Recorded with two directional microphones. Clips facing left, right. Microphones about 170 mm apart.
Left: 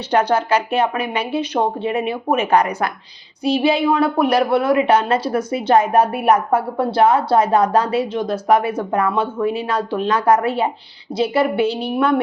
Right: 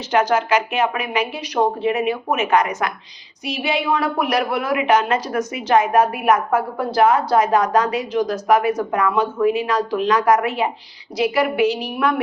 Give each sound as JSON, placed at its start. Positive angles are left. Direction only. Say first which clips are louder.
{"t": 0.1, "sound": "a woman's voice", "louder": "left 1 dB", "side_deg": 30}